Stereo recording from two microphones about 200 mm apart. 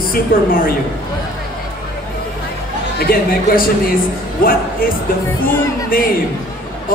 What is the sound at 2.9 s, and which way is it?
Speech, 50° left (ahead or behind).